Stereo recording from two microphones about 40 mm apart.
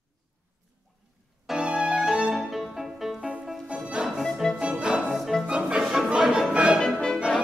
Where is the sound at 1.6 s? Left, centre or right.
Centre.